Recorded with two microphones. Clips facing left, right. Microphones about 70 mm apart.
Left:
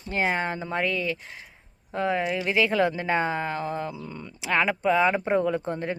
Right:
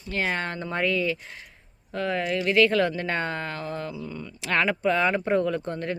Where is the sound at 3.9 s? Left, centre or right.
Left.